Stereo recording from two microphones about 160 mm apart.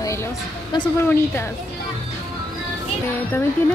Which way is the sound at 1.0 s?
15° left (ahead or behind).